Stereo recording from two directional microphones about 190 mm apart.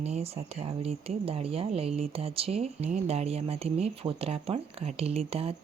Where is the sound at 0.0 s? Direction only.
35° right (ahead or behind).